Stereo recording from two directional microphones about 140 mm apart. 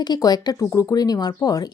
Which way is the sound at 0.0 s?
30° left (ahead or behind).